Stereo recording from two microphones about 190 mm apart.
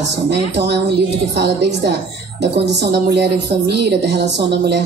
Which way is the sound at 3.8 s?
60° right (ahead or behind).